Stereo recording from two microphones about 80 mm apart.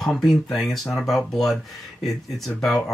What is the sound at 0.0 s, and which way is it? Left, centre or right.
Speech, centre.